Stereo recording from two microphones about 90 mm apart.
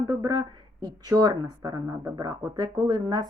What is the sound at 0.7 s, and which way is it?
A woman's voice, 45° right (ahead or behind).